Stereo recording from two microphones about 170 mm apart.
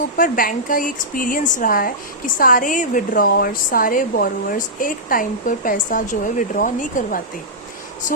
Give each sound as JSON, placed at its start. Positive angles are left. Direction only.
{"t": 0.2, "sound": "speech", "side_deg": 55}